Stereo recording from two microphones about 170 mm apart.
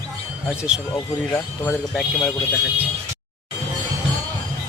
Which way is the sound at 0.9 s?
25° left (ahead or behind).